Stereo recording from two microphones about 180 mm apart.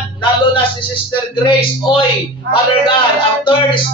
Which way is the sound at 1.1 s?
25° left (ahead or behind).